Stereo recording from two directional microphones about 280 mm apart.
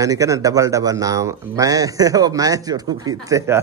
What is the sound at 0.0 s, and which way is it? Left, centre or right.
A man's voice, centre.